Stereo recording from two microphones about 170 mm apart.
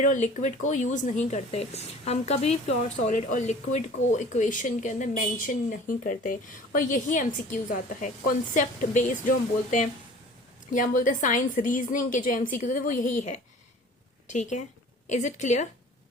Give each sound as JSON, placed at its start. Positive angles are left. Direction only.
{"t": 0.0, "sound": "speech", "side_deg": 50}
{"t": 10.7, "sound": "speech", "side_deg": 50}